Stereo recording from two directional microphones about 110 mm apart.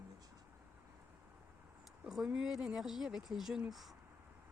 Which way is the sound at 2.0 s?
5° right (ahead or behind).